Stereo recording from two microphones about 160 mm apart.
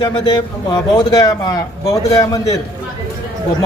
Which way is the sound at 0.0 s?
25° left (ahead or behind).